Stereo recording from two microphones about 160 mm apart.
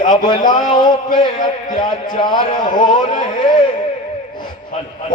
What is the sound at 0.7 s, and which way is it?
A man's voice, 25° left (ahead or behind).